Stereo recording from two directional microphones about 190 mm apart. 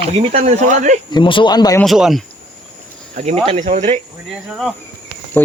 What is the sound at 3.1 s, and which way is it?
Speech, 35° right (ahead or behind).